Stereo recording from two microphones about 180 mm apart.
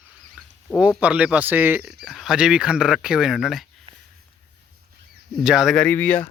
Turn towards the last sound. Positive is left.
turn(degrees=10)  # may be behind; listen again after turning